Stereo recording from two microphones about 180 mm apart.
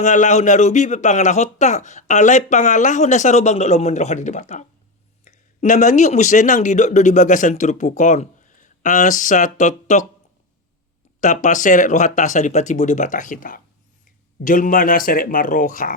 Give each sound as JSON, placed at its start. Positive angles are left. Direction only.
{"t": 0.0, "sound": "speech", "side_deg": 40}
{"t": 11.2, "sound": "speech", "side_deg": 45}